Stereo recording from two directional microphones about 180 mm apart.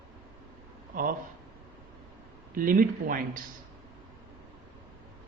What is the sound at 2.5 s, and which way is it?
Speech, 50° right (ahead or behind).